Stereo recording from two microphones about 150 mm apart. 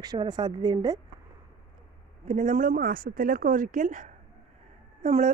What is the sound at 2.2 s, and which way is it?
Speech, 55° right (ahead or behind).